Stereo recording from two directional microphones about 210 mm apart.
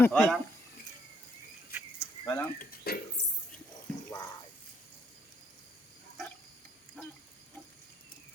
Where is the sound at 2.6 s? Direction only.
45° left (ahead or behind).